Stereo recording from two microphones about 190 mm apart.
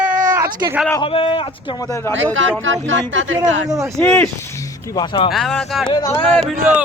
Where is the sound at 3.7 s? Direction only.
15° right (ahead or behind).